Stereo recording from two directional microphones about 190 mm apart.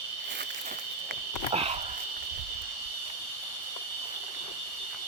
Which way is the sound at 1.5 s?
30° right (ahead or behind).